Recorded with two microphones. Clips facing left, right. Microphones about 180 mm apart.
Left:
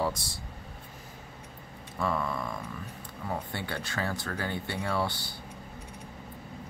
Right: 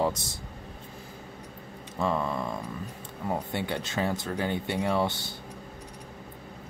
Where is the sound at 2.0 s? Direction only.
20° right (ahead or behind).